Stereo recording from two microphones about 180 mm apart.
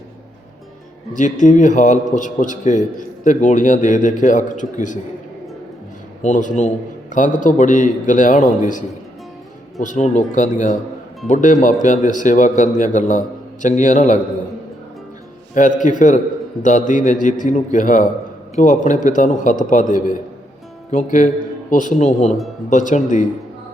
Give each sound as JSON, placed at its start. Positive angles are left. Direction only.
{"t": 1.1, "sound": "a man's voice", "side_deg": 45}
{"t": 6.2, "sound": "a man's voice", "side_deg": 40}
{"t": 9.8, "sound": "a man's voice", "side_deg": 45}
{"t": 15.5, "sound": "a man's voice", "side_deg": 45}